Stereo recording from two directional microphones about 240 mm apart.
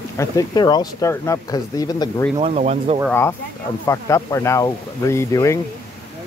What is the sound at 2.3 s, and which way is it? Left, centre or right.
Speech, right.